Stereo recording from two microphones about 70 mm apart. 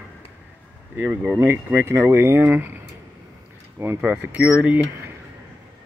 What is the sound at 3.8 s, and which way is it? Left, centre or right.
Speech, right.